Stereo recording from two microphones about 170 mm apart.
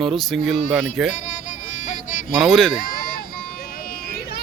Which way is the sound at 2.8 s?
60° left (ahead or behind).